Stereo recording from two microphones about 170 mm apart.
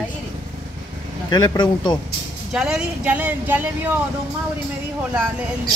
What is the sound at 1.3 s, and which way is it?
Speech, 25° left (ahead or behind).